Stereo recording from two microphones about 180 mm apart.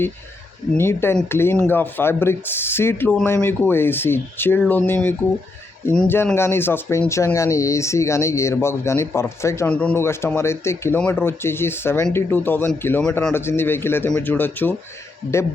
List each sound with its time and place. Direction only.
0.8 s speech: 15° left (ahead or behind)